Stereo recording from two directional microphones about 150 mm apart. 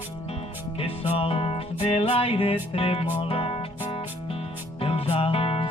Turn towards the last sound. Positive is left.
turn(degrees=40)  # may be behind; listen again after turning